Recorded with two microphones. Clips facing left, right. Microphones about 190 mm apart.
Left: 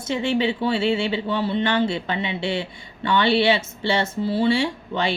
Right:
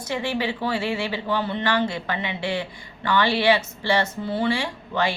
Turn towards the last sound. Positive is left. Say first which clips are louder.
# left 2 dB
turn(degrees=25)  # may be behind; listen again after turning